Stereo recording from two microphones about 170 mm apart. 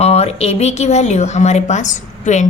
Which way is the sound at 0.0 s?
40° left (ahead or behind).